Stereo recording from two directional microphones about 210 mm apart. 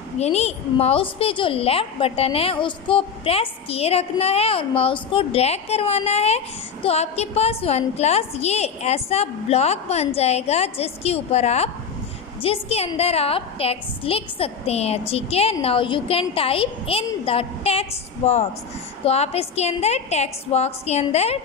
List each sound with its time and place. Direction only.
0.2 s a woman's voice: 30° left (ahead or behind)